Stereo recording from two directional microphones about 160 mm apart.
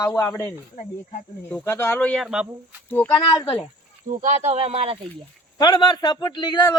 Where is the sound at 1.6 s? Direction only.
15° left (ahead or behind); by 2.4 s centre (ahead or behind).